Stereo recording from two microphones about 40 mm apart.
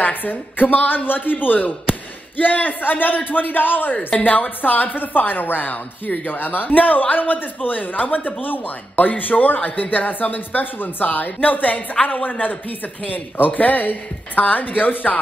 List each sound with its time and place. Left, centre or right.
0.0 s a woman's voice: left